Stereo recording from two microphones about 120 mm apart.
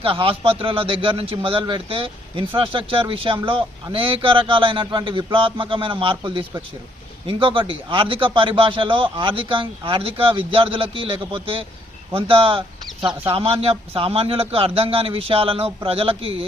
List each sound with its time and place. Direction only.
0.0 s a man's voice: 50° right (ahead or behind)